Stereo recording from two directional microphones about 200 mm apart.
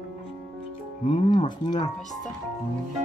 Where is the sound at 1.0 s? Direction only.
25° left (ahead or behind).